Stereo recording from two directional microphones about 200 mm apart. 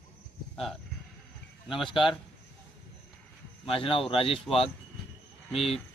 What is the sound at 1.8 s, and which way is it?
Speech, 25° left (ahead or behind).